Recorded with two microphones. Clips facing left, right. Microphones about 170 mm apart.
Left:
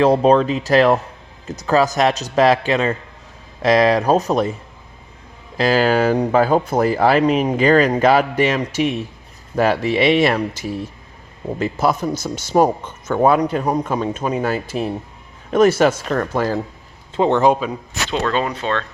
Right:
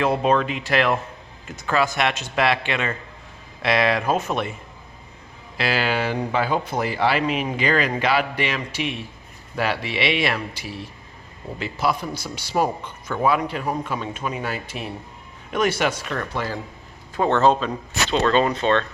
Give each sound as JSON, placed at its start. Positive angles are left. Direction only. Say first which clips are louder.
{"t": 0.0, "sound": "speech", "louder": "left 7 dB", "side_deg": 35}
{"t": 5.5, "sound": "speech", "louder": "left 8 dB", "side_deg": 40}
{"t": 17.2, "sound": "speech", "louder": "left 3 dB", "side_deg": 15}